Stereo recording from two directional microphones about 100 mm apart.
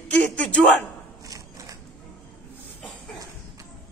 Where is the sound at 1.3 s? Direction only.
35° right (ahead or behind).